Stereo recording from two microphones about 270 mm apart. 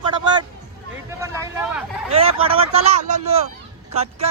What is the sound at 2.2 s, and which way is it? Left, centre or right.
Speech, right.